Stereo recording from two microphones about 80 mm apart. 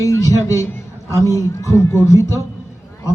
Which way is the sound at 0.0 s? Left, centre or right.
Left.